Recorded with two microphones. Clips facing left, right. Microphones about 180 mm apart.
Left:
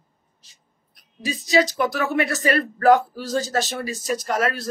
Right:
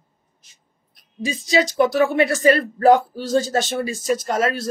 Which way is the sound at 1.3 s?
25° right (ahead or behind).